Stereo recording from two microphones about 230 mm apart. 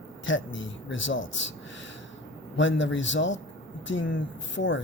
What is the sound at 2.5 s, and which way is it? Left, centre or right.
Speech, left.